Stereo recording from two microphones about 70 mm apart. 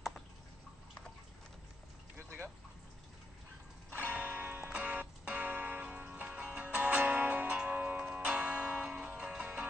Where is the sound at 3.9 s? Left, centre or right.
Centre.